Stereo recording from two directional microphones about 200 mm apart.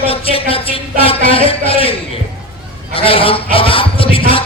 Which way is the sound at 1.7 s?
30° left (ahead or behind).